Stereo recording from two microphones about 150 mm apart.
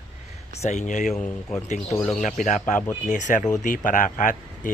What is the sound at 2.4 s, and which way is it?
Speech, 55° left (ahead or behind).